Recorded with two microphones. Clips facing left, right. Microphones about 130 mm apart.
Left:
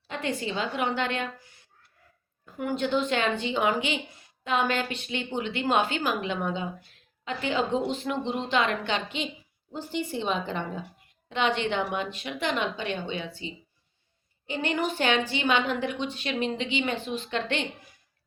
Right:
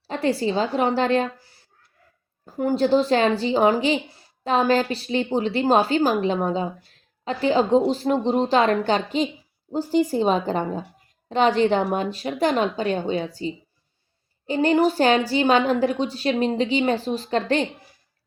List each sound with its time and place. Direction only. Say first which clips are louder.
0.1 s speech: right 8 dB; 35° right (ahead or behind)